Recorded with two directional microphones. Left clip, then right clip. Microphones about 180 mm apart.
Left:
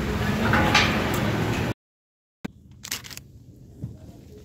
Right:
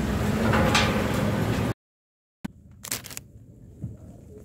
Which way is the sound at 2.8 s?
65° right (ahead or behind).